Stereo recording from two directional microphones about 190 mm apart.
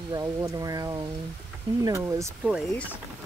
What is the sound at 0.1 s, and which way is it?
Speech, 20° right (ahead or behind).